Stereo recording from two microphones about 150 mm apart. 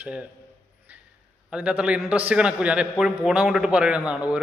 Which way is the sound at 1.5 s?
10° right (ahead or behind).